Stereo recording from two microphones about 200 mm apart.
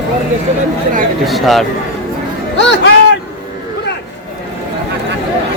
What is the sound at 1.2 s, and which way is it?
Speech, centre (ahead or behind).